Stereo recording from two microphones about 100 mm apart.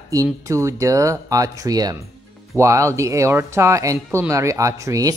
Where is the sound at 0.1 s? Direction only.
35° right (ahead or behind).